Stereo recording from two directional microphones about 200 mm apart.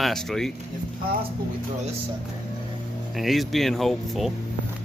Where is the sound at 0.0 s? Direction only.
Centre (ahead or behind).